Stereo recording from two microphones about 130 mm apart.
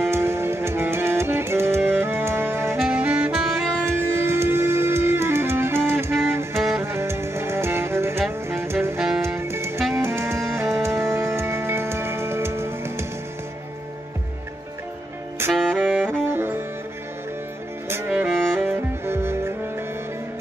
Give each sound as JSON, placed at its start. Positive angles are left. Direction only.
{"t": 0.1, "sound": "music", "side_deg": -20}
{"t": 3.8, "sound": "music", "side_deg": -20}
{"t": 15.5, "sound": "saxophone", "side_deg": 5}
{"t": 16.1, "sound": "saxophone", "side_deg": -15}
{"t": 17.8, "sound": "music", "side_deg": -15}
{"t": 18.4, "sound": "music", "side_deg": 5}
{"t": 18.7, "sound": "music", "side_deg": -20}